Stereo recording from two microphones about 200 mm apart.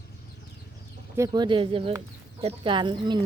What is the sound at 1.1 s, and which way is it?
Speech, 20° right (ahead or behind).